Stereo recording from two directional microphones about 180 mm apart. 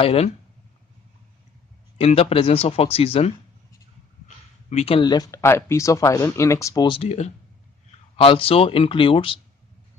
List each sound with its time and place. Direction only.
0.0 s speech: 35° left (ahead or behind)
2.0 s speech: 35° left (ahead or behind)
4.6 s speech: 35° left (ahead or behind)